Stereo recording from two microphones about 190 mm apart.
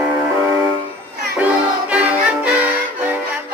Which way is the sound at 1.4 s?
5° right (ahead or behind).